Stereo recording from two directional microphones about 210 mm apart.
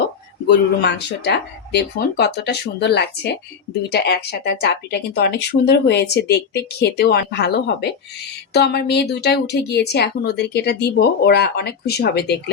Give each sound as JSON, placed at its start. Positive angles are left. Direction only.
{"t": 0.4, "sound": "speech", "side_deg": 55}